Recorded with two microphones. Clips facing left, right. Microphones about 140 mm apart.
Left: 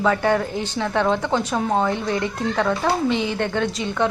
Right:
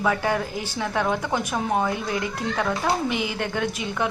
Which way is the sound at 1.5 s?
20° left (ahead or behind).